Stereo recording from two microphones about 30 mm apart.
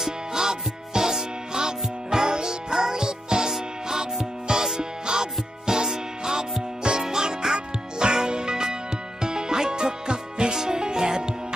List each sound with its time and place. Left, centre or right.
0.0 s music: right